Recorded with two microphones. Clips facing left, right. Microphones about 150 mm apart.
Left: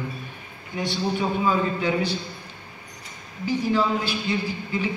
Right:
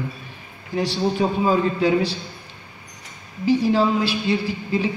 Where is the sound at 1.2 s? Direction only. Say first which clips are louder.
Right 3 dB; 35° right (ahead or behind).